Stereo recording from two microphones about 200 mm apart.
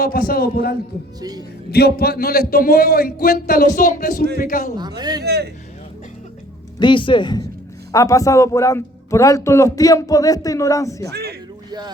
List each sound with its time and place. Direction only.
0.0 s a man's voice: 50° left (ahead or behind)
1.2 s speech: 20° right (ahead or behind)
1.7 s a man's voice: 50° left (ahead or behind)
4.8 s speech: 20° right (ahead or behind)
5.2 s vehicle: 55° right (ahead or behind)
6.7 s a man's voice: 25° left (ahead or behind)
11.1 s a sound: 55° right (ahead or behind)